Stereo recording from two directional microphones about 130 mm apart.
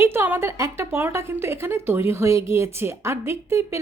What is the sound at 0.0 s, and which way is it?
A woman's voice, 20° right (ahead or behind).